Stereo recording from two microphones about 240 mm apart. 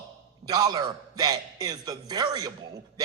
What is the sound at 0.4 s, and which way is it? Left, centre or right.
A man's voice, centre.